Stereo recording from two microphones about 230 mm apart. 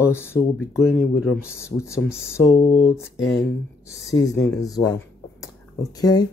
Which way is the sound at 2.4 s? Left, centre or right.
Centre.